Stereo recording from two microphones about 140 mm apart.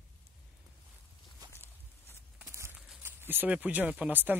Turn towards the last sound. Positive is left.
turn(degrees=-15)  # may be behind; listen again after turning